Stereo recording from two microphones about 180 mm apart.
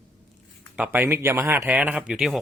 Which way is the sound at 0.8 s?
10° right (ahead or behind).